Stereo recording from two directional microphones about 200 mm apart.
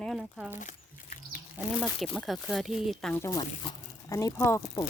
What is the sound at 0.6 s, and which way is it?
Livestock, 40° left (ahead or behind).